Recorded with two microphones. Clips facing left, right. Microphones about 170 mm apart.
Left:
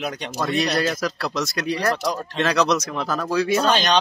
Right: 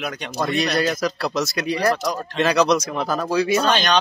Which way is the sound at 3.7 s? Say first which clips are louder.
Even; 35° left (ahead or behind).